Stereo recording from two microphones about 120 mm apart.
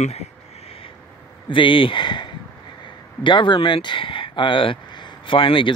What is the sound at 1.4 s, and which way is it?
Speech, 45° left (ahead or behind).